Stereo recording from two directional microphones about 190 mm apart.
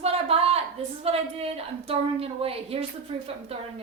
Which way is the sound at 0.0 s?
30° right (ahead or behind).